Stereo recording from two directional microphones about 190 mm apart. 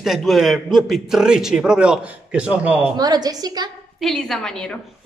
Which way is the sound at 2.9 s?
20° right (ahead or behind).